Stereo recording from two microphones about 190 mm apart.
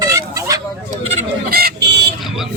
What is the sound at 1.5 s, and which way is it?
Speech, 55° right (ahead or behind).